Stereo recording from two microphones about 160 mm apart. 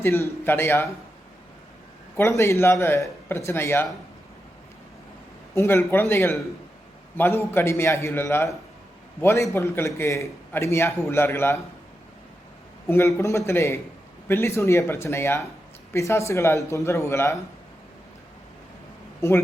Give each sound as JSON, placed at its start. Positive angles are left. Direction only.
{"t": 0.0, "sound": "a man's voice", "side_deg": 15}
{"t": 2.1, "sound": "a man's voice", "side_deg": 15}
{"t": 5.5, "sound": "a man's voice", "side_deg": 15}
{"t": 12.9, "sound": "a man's voice", "side_deg": 15}
{"t": 19.2, "sound": "a man's voice", "side_deg": 15}